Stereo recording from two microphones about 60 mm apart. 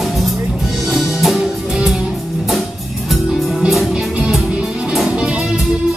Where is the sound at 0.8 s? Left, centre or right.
Centre.